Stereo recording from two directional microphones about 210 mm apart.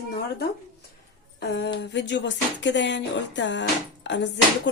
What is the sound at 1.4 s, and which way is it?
Speech, 55° left (ahead or behind).